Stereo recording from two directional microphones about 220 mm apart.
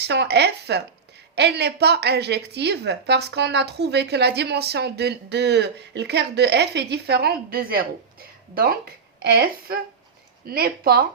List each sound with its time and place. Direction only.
0.0 s a woman's voice: 50° right (ahead or behind)
10.4 s a woman's voice: 45° right (ahead or behind)